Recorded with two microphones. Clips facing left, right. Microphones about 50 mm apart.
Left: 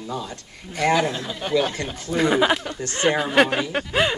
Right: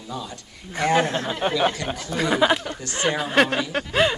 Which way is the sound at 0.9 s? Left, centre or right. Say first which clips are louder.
Right 4 dB; right.